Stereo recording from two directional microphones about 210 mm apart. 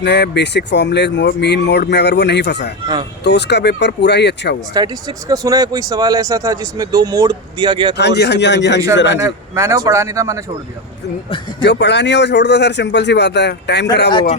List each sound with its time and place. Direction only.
0.0 s speech: 55° left (ahead or behind)
4.7 s speech: 20° right (ahead or behind)
7.9 s speech: 55° left (ahead or behind)
9.1 s speech: 15° right (ahead or behind)
11.6 s speech: 55° left (ahead or behind)
14.1 s a man's voice: 25° left (ahead or behind)